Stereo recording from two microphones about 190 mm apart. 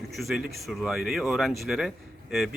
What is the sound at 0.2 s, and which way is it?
A man's voice, centre (ahead or behind).